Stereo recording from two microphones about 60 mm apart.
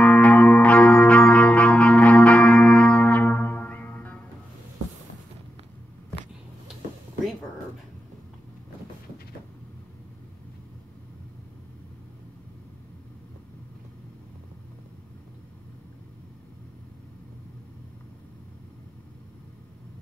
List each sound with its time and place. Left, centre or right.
0.0 s music: left